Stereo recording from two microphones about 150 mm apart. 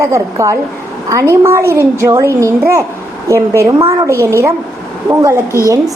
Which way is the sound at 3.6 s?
20° right (ahead or behind).